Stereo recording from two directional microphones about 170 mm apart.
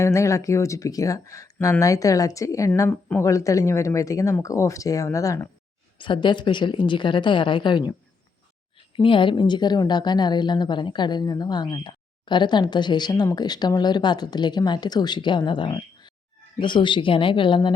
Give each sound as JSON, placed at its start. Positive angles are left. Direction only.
{"t": 0.0, "sound": "a woman's voice", "side_deg": 15}
{"t": 9.0, "sound": "a woman's voice", "side_deg": 30}